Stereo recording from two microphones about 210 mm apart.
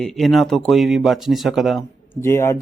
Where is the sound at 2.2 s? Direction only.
10° left (ahead or behind).